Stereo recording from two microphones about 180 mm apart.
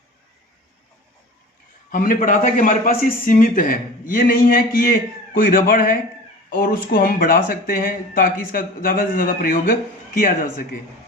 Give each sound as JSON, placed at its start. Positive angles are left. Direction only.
{"t": 1.9, "sound": "a man's voice", "side_deg": 50}